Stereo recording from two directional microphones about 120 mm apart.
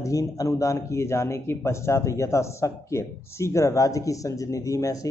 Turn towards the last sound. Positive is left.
turn(degrees=30)  # may be behind; listen again after turning